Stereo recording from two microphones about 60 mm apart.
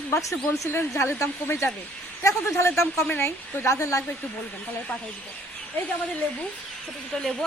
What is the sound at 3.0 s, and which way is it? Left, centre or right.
Speech, left.